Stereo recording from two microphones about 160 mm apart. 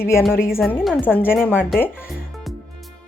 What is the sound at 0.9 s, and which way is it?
Speech, 10° left (ahead or behind).